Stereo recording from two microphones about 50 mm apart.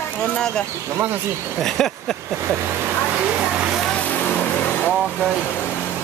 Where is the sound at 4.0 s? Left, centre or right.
Left.